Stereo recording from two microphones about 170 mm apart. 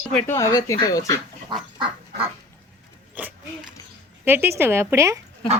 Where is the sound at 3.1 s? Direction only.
10° right (ahead or behind).